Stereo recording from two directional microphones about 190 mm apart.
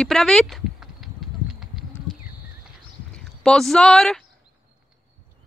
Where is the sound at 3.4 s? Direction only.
5° left (ahead or behind).